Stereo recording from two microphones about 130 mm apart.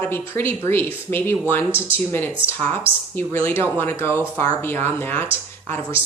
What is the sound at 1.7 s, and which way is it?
Speech, 15° right (ahead or behind).